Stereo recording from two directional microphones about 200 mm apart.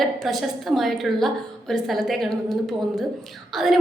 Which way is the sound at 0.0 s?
Centre (ahead or behind).